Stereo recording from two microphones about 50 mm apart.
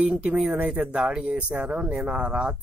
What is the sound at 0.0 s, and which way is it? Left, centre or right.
Speech, right.